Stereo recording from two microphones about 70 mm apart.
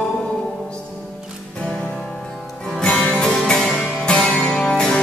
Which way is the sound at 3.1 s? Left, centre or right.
Centre.